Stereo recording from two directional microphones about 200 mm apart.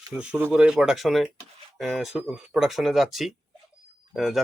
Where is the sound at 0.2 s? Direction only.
10° right (ahead or behind).